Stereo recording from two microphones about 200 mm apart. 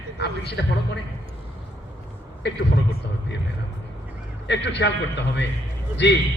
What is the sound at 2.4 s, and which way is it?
Speech, 55° left (ahead or behind).